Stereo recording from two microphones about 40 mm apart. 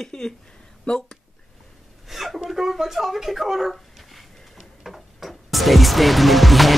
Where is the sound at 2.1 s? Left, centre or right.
Centre.